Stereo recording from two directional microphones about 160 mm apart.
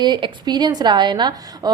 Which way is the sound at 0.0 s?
25° right (ahead or behind).